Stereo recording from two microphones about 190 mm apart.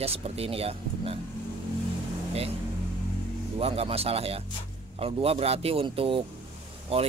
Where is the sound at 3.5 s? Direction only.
30° right (ahead or behind).